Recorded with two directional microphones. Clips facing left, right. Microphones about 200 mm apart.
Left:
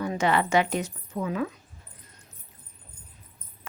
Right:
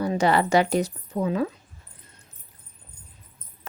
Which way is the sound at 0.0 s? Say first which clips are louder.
Right 3 dB; 35° right (ahead or behind).